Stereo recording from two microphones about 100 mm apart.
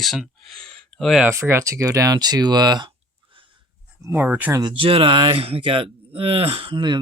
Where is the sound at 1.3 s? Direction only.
25° right (ahead or behind); by 2.9 s 45° right (ahead or behind).